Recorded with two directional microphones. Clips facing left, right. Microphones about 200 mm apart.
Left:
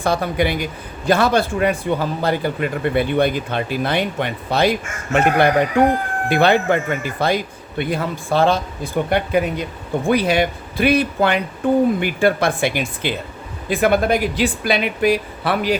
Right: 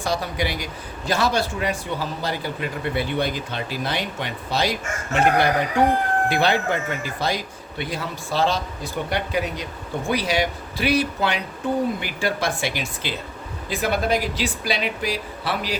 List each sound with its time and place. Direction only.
0.0 s a man's voice: 55° left (ahead or behind)